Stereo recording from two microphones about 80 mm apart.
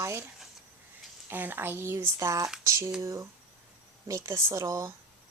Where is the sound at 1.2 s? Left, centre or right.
Right.